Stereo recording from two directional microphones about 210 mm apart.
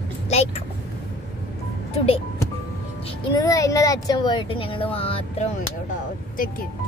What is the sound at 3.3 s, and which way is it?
Speech, 15° left (ahead or behind).